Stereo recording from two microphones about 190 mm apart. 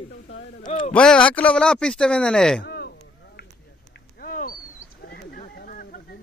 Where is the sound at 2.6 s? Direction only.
55° left (ahead or behind).